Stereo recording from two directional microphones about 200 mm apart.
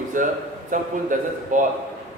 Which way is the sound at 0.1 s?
40° right (ahead or behind).